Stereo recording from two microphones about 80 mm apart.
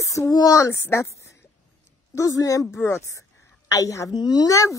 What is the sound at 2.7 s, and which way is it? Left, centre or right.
A woman's voice, left.